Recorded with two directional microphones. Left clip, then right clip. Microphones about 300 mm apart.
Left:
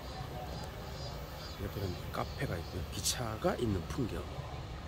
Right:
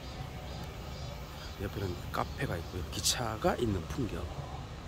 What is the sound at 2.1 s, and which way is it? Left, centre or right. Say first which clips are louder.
Speech: right 4 dB; centre.